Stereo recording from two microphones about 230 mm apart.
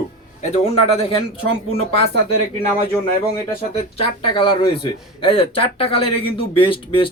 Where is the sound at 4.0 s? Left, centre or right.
Left.